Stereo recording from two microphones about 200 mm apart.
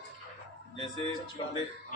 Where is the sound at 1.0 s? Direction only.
25° left (ahead or behind).